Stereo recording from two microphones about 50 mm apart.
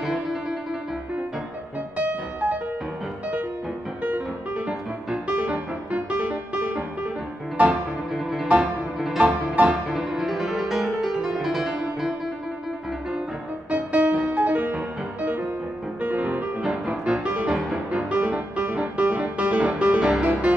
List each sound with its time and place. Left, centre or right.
0.0 s music: centre
2.0 s music: right
5.9 s music: right
8.1 s music: centre
9.2 s music: right
9.8 s music: centre
13.7 s music: right
16.0 s music: right
16.6 s music: centre
17.2 s music: right
17.5 s music: centre
18.1 s music: right
20.0 s music: centre